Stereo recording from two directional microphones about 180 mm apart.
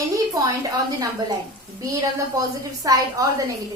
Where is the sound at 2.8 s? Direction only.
20° right (ahead or behind).